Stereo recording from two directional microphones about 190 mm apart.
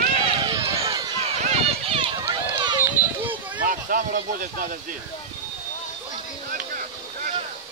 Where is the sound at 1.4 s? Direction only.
30° right (ahead or behind).